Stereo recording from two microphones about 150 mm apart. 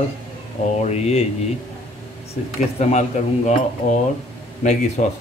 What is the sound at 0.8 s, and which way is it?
Speech, 50° left (ahead or behind).